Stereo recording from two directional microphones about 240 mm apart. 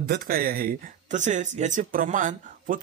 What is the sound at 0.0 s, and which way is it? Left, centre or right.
Speech, right.